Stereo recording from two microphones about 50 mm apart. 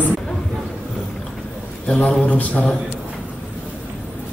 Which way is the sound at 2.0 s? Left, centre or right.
Left.